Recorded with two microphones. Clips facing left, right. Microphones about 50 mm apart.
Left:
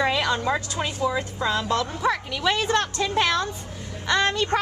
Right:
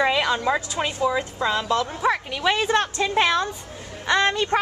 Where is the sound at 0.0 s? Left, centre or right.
Centre.